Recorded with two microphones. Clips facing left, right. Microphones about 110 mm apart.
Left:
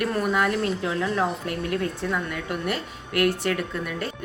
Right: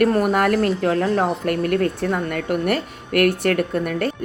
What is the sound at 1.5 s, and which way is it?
Speech, 65° right (ahead or behind).